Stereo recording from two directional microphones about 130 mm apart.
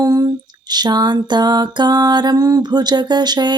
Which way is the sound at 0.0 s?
30° right (ahead or behind).